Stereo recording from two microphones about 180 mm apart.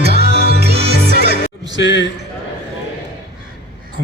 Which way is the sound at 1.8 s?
85° left.